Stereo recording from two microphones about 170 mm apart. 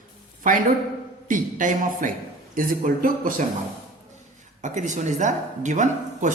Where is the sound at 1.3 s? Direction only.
50° right (ahead or behind).